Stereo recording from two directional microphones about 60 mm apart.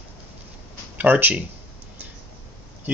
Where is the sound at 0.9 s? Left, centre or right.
Right.